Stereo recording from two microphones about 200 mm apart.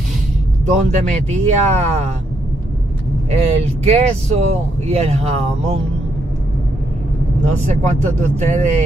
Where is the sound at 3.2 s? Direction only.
30° right (ahead or behind).